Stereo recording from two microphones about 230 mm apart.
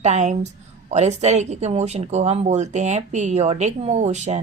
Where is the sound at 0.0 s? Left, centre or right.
Right.